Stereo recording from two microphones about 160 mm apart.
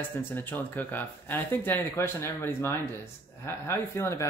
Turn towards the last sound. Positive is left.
turn(degrees=15)  # may be behind; listen again after turning